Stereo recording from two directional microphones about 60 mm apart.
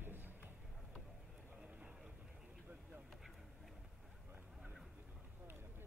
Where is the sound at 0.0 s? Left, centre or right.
Right.